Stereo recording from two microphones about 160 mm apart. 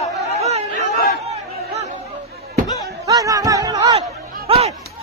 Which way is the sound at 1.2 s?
40° right (ahead or behind).